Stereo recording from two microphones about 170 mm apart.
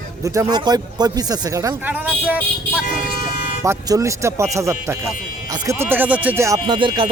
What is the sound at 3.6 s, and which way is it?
Speech, 20° right (ahead or behind).